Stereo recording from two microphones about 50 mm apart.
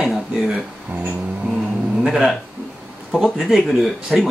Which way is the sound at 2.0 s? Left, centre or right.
Centre.